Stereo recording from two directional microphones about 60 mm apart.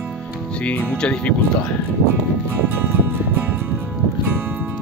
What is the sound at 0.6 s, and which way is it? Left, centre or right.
Speech, left.